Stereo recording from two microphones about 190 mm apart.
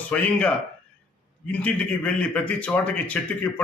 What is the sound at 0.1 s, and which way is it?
A man's voice, 5° left (ahead or behind).